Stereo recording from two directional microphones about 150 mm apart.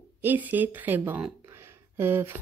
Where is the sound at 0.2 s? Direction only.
10° right (ahead or behind).